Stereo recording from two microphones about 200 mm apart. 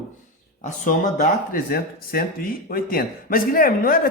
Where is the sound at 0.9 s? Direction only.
40° left (ahead or behind).